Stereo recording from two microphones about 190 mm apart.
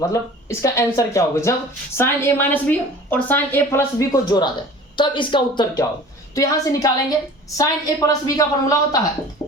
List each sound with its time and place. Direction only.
0.0 s a woman's voice: 15° left (ahead or behind)
9.4 s music: 20° left (ahead or behind)